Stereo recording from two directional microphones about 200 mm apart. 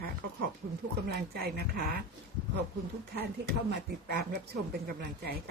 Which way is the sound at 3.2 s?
50° right (ahead or behind).